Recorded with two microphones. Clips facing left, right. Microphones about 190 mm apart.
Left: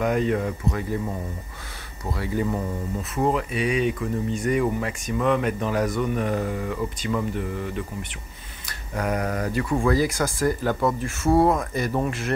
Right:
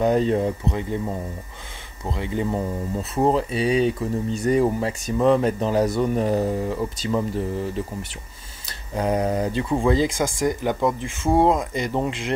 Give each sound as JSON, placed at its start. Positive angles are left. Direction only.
{"t": 0.0, "sound": "speech", "side_deg": -30}
{"t": 2.0, "sound": "speech", "side_deg": -25}